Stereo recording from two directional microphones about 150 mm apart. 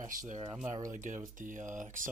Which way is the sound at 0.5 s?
20° right (ahead or behind).